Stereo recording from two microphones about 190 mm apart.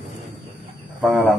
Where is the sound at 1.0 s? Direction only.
5° right (ahead or behind).